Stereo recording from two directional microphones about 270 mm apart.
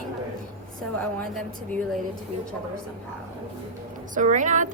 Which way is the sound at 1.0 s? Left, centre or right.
Centre.